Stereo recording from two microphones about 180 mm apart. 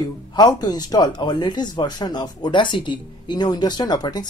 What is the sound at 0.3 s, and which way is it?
Speech, 20° left (ahead or behind).